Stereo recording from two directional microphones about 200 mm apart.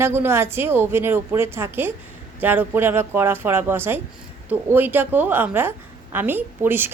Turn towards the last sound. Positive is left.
turn(degrees=-10)  # may be behind; listen again after turning